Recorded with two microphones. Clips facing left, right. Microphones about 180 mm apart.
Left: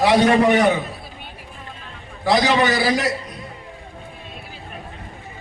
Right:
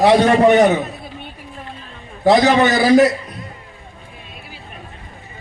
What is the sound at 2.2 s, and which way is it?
Speech, 45° right (ahead or behind).